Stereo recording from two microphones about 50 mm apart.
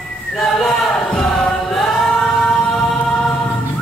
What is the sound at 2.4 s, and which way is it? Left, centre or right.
Music, centre.